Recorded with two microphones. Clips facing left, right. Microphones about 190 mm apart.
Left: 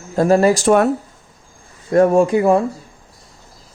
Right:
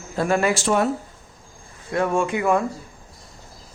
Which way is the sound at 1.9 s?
40° left (ahead or behind).